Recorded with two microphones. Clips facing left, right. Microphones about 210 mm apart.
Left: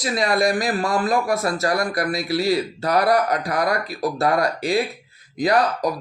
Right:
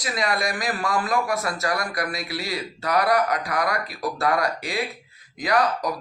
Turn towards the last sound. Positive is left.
turn(degrees=30)  # may be behind; listen again after turning